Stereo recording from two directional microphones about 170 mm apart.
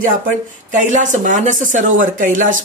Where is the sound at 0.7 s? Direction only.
45° right (ahead or behind).